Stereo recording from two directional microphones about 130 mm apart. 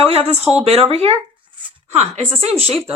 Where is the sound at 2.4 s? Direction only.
50° right (ahead or behind).